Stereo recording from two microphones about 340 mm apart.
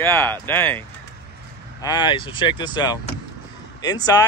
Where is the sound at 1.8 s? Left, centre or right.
Centre.